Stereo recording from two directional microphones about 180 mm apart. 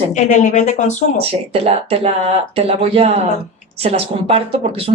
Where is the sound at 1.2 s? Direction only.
30° right (ahead or behind).